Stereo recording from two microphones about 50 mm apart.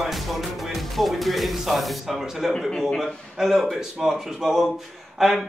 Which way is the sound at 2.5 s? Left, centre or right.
Centre.